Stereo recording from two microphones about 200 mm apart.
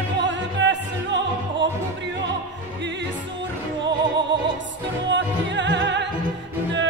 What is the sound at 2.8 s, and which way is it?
Opera, 60° right (ahead or behind).